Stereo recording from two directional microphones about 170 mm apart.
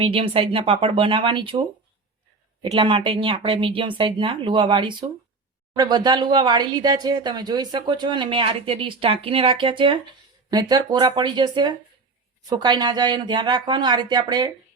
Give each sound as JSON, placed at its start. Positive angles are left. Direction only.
{"t": 0.0, "sound": "speech", "side_deg": -30}